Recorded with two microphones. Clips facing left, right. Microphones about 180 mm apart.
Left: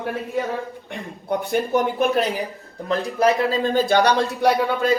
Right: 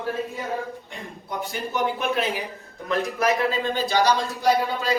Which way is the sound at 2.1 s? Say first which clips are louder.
Left 4 dB; 35° left (ahead or behind).